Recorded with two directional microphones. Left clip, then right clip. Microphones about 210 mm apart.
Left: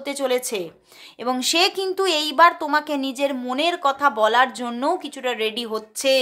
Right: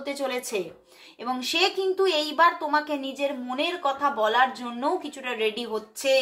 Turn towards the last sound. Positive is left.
turn(degrees=40)  # may be behind; listen again after turning